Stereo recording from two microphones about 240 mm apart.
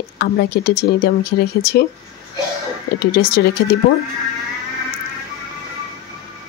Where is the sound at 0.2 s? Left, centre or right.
Left.